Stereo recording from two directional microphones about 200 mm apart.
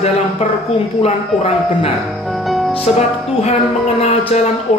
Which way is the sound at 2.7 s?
35° left (ahead or behind).